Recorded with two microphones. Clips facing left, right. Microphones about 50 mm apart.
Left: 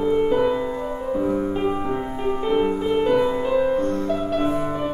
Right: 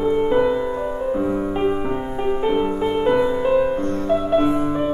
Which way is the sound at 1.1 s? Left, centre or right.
Centre.